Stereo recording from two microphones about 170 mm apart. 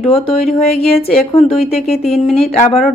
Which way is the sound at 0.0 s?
35° left (ahead or behind).